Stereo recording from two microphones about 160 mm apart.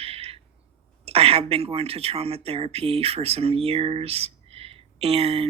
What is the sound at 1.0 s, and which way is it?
Speech, 40° right (ahead or behind).